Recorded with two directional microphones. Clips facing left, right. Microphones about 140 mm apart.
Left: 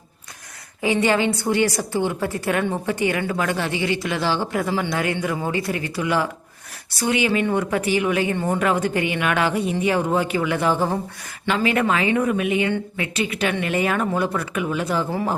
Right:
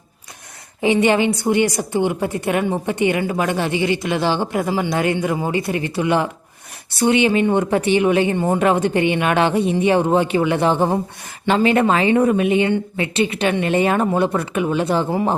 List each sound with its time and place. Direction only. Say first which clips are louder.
0.8 s a woman's voice: right 4 dB; 20° right (ahead or behind)
8.4 s a woman's voice: right 4 dB; 15° right (ahead or behind)